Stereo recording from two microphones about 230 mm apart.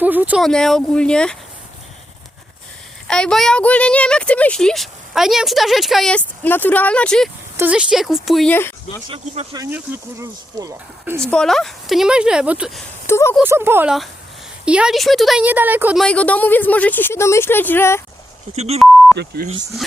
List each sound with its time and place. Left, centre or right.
0.0 s speech: centre
3.1 s speech: centre
7.5 s speech: centre
9.0 s speech: right
9.6 s speech: centre
11.3 s speech: centre
13.1 s speech: centre
13.3 s speech: centre
16.0 s a woman's voice: centre
18.5 s speech: right
19.1 s speech: right